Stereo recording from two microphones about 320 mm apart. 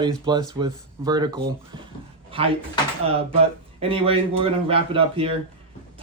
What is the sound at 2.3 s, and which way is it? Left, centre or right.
Drawer open or close, centre.